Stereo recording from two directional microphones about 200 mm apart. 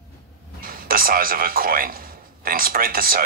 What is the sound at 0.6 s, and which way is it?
Speech, 45° right (ahead or behind).